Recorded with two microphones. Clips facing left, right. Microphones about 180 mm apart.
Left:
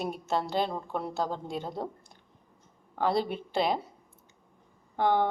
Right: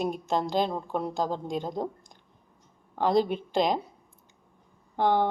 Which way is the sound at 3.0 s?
5° left (ahead or behind).